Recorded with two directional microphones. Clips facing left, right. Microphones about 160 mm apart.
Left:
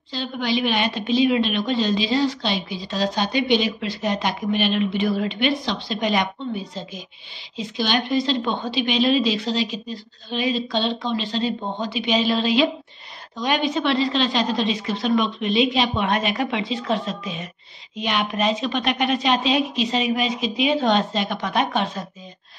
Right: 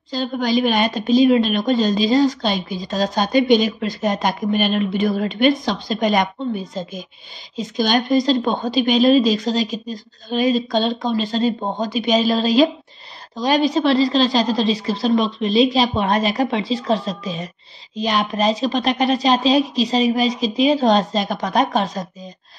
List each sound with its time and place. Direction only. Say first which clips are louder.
0.1 s a woman's voice: right 5 dB; 45° right (ahead or behind)